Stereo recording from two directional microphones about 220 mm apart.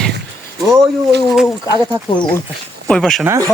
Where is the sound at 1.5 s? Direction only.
15° left (ahead or behind).